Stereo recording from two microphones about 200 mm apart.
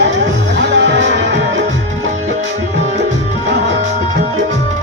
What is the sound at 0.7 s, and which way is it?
Music, 60° right (ahead or behind).